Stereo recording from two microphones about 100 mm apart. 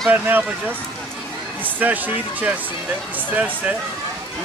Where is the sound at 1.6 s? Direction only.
15° right (ahead or behind).